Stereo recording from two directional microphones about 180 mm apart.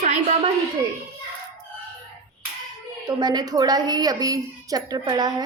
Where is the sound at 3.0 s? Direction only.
25° right (ahead or behind).